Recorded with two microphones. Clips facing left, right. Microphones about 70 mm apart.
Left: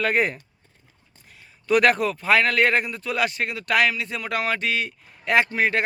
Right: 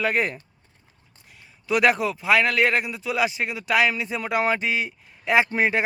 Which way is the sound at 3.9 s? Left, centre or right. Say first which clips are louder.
Right 2 dB; right.